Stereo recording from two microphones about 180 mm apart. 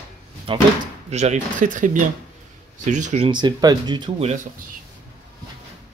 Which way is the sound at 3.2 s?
25° right (ahead or behind).